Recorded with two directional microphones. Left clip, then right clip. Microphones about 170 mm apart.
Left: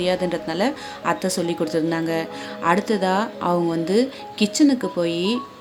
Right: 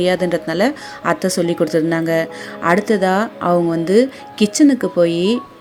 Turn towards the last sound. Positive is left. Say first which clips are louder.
# right 7 dB
turn(degrees=-20)  # may be behind; listen again after turning